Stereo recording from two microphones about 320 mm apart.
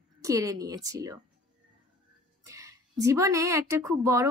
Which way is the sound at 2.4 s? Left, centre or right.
Centre.